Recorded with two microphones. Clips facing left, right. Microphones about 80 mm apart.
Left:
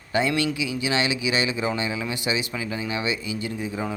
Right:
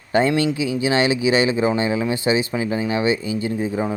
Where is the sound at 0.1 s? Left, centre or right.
Right.